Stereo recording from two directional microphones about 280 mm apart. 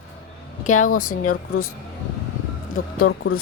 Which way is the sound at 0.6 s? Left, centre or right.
Left.